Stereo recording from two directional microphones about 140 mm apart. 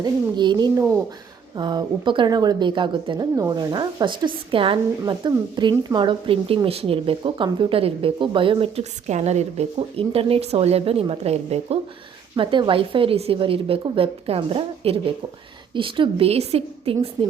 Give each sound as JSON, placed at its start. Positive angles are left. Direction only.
{"t": 0.0, "sound": "a woman's voice", "side_deg": -30}
{"t": 12.4, "sound": "a woman's voice", "side_deg": -35}